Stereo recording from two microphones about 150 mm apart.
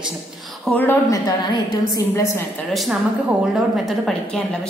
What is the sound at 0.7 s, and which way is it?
A woman's voice, 10° left (ahead or behind).